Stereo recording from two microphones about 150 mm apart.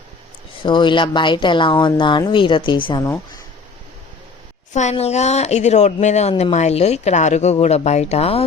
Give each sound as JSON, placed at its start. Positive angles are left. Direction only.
{"t": 0.6, "sound": "speech", "side_deg": 30}
{"t": 4.7, "sound": "speech", "side_deg": 50}